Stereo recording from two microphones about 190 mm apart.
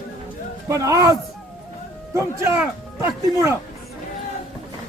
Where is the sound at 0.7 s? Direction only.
15° right (ahead or behind).